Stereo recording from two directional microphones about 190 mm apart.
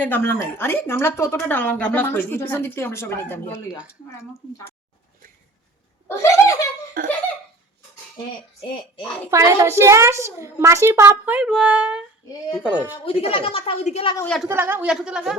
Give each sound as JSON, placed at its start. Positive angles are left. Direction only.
{"t": 0.0, "sound": "speech", "side_deg": 10}
{"t": 6.1, "sound": "speech", "side_deg": 15}
{"t": 7.0, "sound": "laughter", "side_deg": -50}
{"t": 9.3, "sound": "a child's voice", "side_deg": -15}
{"t": 13.1, "sound": "a woman's voice", "side_deg": 30}
{"t": 14.4, "sound": "a woman's voice", "side_deg": -10}